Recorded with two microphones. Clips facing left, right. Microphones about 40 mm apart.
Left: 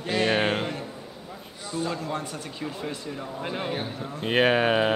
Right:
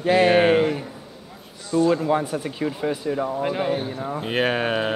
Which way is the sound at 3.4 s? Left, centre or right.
Centre.